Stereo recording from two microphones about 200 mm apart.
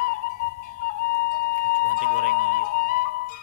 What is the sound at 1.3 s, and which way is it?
Music, 45° left (ahead or behind).